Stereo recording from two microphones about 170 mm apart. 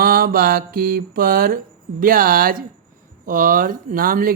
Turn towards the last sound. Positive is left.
turn(degrees=-55)  # may be behind; listen again after turning